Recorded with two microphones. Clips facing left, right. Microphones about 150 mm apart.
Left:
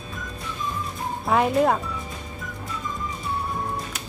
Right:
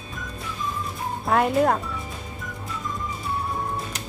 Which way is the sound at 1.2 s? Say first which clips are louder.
Even; centre (ahead or behind).